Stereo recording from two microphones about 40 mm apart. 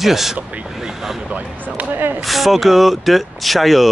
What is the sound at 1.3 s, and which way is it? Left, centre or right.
Speech, right.